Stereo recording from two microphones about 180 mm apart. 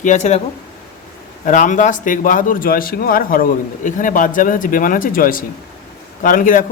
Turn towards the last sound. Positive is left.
turn(degrees=50)  # may be behind; listen again after turning